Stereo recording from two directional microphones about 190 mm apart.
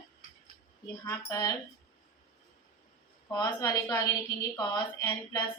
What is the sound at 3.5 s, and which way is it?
Speech, 20° left (ahead or behind).